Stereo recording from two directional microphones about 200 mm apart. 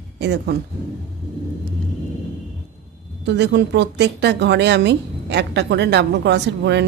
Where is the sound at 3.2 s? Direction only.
60° right (ahead or behind).